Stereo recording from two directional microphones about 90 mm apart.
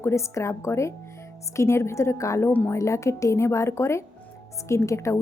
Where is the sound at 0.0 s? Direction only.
30° left (ahead or behind).